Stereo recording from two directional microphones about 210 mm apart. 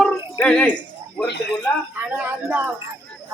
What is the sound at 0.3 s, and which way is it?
Speech, 5° left (ahead or behind).